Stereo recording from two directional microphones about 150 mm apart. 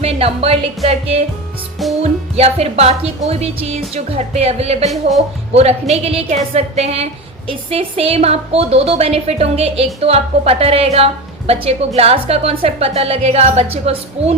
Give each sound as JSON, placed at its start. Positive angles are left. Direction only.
{"t": 0.0, "sound": "a woman's voice", "side_deg": -40}